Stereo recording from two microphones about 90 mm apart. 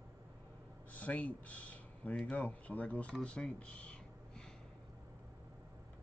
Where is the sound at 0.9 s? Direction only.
15° left (ahead or behind).